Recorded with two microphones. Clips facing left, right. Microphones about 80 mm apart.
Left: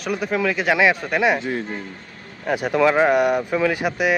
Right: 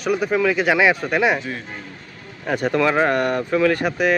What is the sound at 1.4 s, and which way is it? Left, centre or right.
Speech, left.